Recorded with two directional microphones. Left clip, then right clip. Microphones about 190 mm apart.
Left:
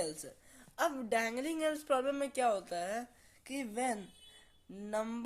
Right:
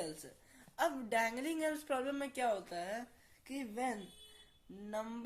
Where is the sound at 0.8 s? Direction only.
35° left (ahead or behind).